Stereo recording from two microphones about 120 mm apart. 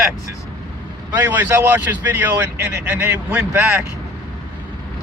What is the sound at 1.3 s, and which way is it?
Speech, 20° right (ahead or behind).